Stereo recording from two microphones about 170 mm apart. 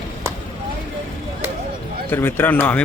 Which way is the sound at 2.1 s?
15° left (ahead or behind).